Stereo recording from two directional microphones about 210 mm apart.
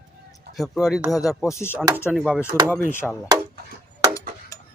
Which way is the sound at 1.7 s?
10° right (ahead or behind).